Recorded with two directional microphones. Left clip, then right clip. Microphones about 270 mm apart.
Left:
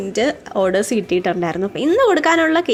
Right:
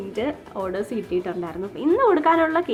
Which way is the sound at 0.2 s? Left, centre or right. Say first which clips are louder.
Left 10 dB; centre.